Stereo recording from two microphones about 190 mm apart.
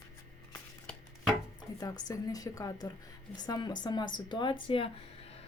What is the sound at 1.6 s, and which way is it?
Speech, 20° left (ahead or behind).